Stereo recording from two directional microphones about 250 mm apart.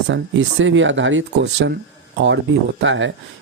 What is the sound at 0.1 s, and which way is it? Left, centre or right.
Speech, right.